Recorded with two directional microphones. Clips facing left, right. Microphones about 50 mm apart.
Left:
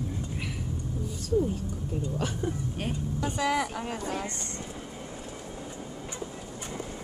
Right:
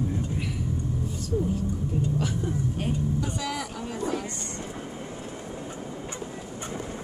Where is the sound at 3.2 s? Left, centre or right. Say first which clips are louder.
Left 3 dB; left.